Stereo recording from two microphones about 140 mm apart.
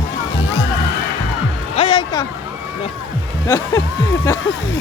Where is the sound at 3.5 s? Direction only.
20° left (ahead or behind).